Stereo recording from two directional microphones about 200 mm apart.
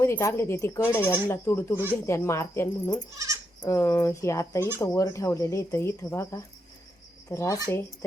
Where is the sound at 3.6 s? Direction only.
15° left (ahead or behind).